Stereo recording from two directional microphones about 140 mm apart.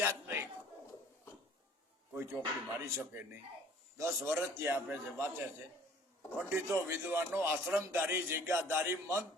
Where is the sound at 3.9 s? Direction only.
20° right (ahead or behind).